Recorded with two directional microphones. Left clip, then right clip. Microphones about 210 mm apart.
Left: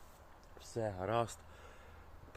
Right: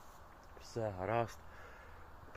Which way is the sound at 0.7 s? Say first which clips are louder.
Left 1 dB; 15° left (ahead or behind).